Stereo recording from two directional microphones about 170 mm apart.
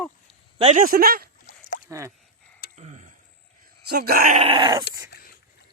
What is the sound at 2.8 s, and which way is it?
Tick-tock, 45° right (ahead or behind).